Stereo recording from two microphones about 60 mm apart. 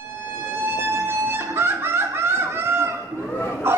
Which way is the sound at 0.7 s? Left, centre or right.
Right.